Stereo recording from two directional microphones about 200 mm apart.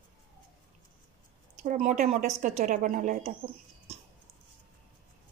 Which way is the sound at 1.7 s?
40° right (ahead or behind).